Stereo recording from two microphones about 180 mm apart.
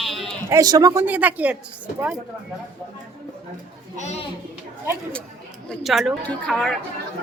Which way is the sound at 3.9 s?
40° left (ahead or behind).